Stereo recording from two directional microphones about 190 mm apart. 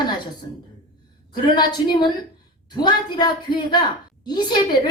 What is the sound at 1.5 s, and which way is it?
A woman's voice, 20° left (ahead or behind).